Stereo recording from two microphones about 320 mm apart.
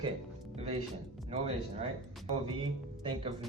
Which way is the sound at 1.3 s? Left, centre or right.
Centre.